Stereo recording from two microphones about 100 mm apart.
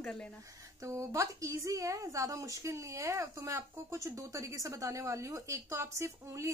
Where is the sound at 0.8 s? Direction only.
30° right (ahead or behind).